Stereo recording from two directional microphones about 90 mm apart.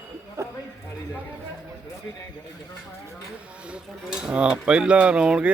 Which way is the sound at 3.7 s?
5° right (ahead or behind).